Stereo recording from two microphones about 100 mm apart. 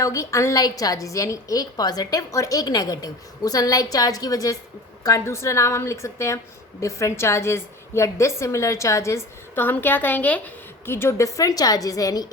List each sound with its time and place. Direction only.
0.0 s a woman's voice: 30° left (ahead or behind)